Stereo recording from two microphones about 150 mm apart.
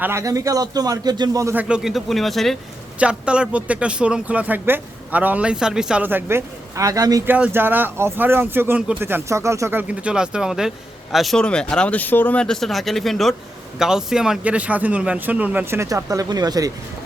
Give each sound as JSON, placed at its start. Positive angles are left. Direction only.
{"t": 0.0, "sound": "a man's voice", "side_deg": -20}
{"t": 1.5, "sound": "speech", "side_deg": -5}
{"t": 7.3, "sound": "speech", "side_deg": -10}